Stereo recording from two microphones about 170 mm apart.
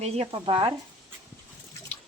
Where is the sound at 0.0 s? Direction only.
35° right (ahead or behind).